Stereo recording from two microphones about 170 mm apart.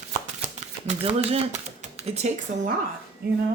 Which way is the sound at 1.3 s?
40° right (ahead or behind).